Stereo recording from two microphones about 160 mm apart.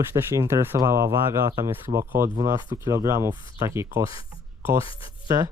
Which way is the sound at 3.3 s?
30° left (ahead or behind).